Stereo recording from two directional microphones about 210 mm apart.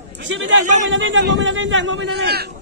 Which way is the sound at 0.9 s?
60° right (ahead or behind).